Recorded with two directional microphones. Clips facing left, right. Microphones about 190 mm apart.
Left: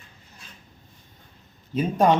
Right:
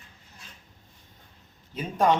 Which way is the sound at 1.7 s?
15° left (ahead or behind).